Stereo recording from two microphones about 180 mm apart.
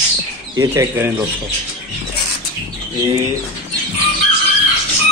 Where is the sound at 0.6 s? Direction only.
20° right (ahead or behind).